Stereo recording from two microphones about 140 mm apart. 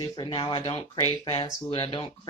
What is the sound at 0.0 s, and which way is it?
Speech, 30° left (ahead or behind).